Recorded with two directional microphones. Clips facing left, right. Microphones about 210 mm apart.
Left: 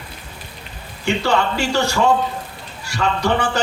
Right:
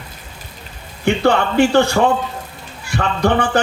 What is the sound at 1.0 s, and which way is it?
Speech, 55° right (ahead or behind).